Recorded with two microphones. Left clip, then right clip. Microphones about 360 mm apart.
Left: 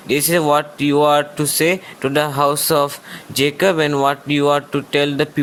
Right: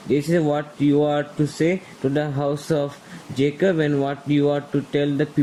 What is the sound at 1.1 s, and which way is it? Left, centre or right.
Speech, left.